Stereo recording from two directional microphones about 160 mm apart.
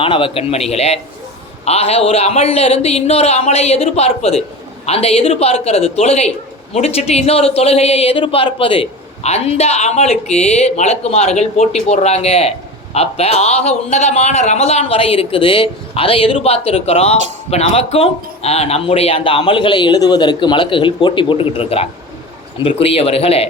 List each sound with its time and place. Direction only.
0.0 s speech: 35° left (ahead or behind)